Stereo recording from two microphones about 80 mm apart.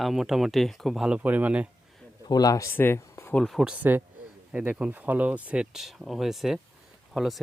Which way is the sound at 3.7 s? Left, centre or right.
Right.